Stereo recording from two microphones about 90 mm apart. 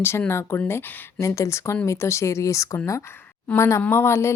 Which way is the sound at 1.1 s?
35° left (ahead or behind).